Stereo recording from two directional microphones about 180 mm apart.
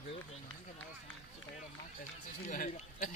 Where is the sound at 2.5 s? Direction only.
50° left (ahead or behind).